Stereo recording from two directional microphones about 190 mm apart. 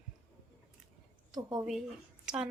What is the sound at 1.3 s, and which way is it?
Speech, 20° right (ahead or behind).